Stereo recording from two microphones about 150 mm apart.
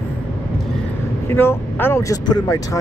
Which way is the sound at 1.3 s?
15° left (ahead or behind).